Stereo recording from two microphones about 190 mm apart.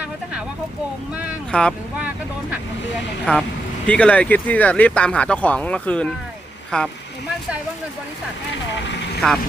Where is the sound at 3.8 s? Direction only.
5° left (ahead or behind).